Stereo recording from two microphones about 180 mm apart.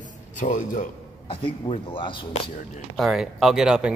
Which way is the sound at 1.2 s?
30° left (ahead or behind).